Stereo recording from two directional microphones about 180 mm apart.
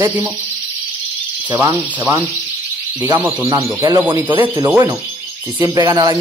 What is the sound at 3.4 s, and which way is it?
Speech, 25° right (ahead or behind).